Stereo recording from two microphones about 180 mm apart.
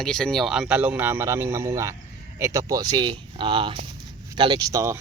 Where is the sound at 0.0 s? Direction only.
5° left (ahead or behind).